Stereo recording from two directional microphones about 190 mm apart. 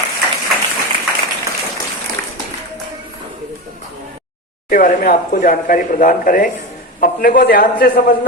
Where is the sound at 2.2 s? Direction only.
50° right (ahead or behind).